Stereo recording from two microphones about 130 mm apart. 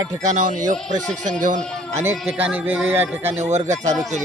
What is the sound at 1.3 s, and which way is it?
Speech, 80° right.